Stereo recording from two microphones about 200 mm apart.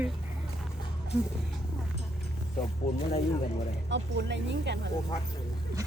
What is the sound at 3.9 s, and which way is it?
Speech, 60° right (ahead or behind).